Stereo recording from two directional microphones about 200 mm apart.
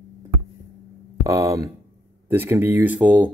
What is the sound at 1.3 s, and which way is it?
Speech, 15° right (ahead or behind).